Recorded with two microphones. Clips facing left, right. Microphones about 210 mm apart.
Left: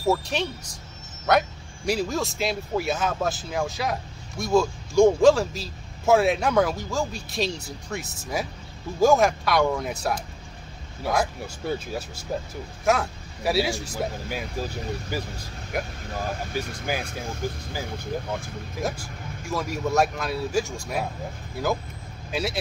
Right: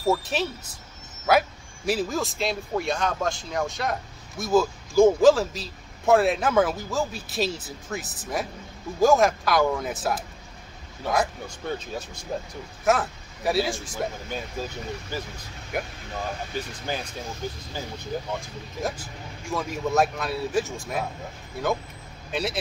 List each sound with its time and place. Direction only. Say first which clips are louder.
0.0 s speech: even; centre (ahead or behind)
15.1 s speech: left 2 dB; 10° left (ahead or behind)
15.7 s speech: left 1 dB; centre (ahead or behind)
16.5 s speech: left 3 dB; 10° left (ahead or behind)
18.8 s speech: left 1 dB; centre (ahead or behind)